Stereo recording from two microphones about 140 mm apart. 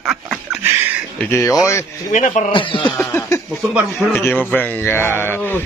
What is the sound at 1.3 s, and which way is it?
Speech, 20° left (ahead or behind).